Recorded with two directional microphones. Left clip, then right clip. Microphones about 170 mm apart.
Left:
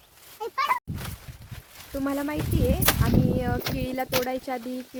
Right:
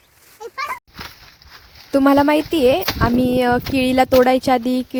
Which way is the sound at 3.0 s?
65° right (ahead or behind).